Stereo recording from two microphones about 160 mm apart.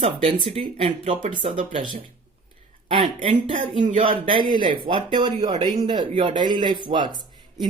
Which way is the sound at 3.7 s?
50° right (ahead or behind).